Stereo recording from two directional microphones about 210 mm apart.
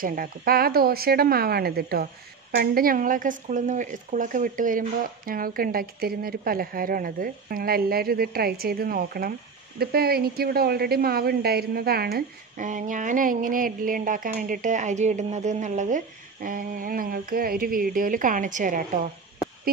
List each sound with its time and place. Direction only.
0.0 s speech: 40° right (ahead or behind)